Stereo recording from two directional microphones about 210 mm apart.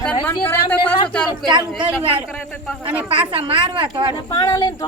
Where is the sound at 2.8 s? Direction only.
5° right (ahead or behind).